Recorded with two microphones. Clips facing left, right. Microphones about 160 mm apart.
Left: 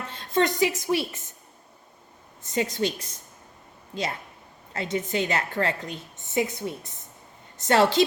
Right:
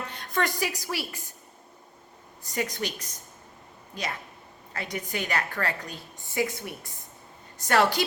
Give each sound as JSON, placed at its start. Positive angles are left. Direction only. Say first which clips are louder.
{"t": 0.1, "sound": "a woman's voice", "louder": "left 7 dB", "side_deg": 25}
{"t": 2.4, "sound": "a woman's voice", "louder": "left 5 dB", "side_deg": 25}
{"t": 4.7, "sound": "a woman's voice", "louder": "left 6 dB", "side_deg": 25}